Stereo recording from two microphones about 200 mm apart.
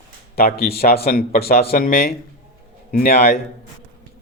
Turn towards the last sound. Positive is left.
turn(degrees=45)  # may be behind; listen again after turning